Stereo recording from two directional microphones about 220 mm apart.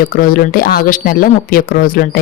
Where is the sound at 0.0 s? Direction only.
40° left (ahead or behind).